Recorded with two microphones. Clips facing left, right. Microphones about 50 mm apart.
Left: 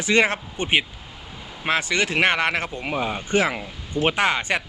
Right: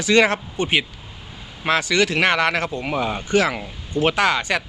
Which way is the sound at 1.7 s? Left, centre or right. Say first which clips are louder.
Right 3 dB; centre.